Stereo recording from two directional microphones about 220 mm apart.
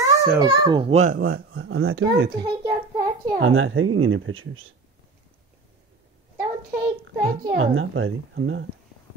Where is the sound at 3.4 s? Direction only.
65° right (ahead or behind).